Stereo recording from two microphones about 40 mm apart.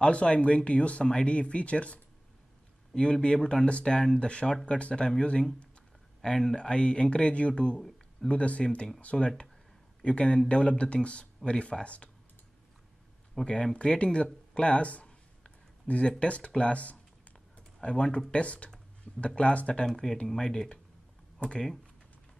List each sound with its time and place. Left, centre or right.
0.0 s speech: left
6.2 s speech: centre
8.6 s speech: centre
9.1 s speech: centre
10.0 s speech: left
13.4 s speech: centre
13.7 s speech: left
16.1 s speech: left
19.9 s speech: centre; by 21.6 s left